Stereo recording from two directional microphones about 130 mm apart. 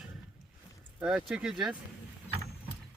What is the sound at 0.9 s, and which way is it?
Speech, 5° right (ahead or behind).